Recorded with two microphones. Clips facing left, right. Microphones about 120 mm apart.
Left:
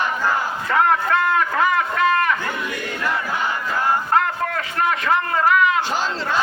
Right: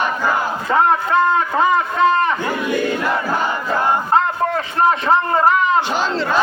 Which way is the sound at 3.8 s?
25° right (ahead or behind).